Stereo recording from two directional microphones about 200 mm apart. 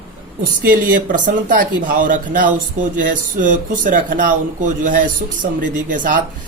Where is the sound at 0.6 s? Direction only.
45° right (ahead or behind).